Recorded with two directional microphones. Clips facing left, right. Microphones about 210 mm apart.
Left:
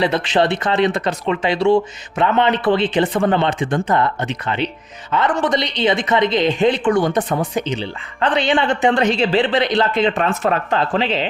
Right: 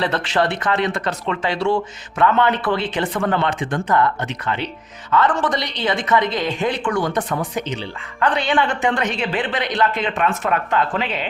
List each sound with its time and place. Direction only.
0.0 s a woman's voice: 15° left (ahead or behind)